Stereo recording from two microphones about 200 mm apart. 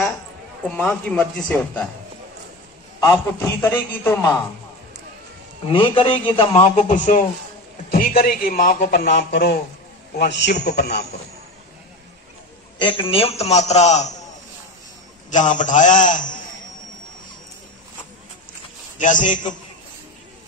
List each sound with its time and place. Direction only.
0.7 s speech: 5° left (ahead or behind)
3.0 s a man's voice: 15° left (ahead or behind)
5.7 s a man's voice: 25° left (ahead or behind); by 11.1 s 55° left (ahead or behind)
12.7 s a man's voice: 25° left (ahead or behind)
15.2 s a man's voice: 40° left (ahead or behind)
18.9 s a man's voice: 40° left (ahead or behind)